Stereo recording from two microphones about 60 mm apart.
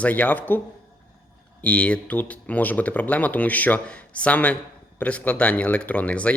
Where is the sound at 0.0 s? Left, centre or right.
Left.